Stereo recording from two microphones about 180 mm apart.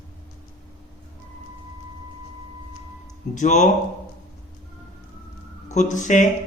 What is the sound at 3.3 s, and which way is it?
Speech, 40° left (ahead or behind).